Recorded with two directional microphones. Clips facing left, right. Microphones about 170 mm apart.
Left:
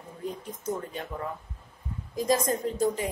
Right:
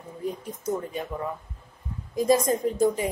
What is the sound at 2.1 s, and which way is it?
Speech, 10° right (ahead or behind).